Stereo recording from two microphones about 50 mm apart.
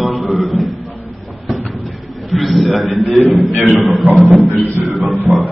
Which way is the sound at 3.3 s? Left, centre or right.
Centre.